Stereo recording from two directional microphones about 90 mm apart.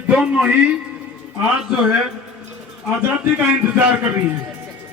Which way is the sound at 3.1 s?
20° right (ahead or behind).